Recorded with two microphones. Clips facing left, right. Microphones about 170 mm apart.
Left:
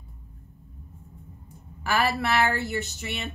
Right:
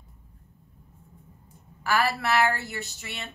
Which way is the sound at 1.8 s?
20° left (ahead or behind).